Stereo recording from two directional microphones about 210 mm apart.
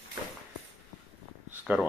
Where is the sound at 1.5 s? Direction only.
10° right (ahead or behind).